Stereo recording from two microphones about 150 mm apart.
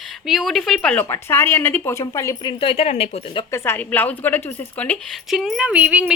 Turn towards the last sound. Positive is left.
turn(degrees=-10)  # may be behind; listen again after turning